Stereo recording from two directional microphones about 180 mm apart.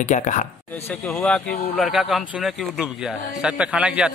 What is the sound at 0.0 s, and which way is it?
Speech, 45° left (ahead or behind).